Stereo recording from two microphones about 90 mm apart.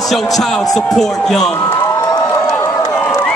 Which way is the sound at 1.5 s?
20° left (ahead or behind).